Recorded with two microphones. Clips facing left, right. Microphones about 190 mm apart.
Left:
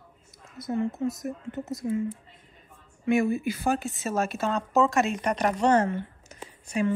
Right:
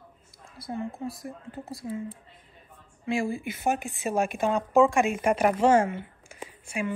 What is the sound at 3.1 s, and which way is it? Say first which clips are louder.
A woman's voice: left 5 dB; 30° right (ahead or behind).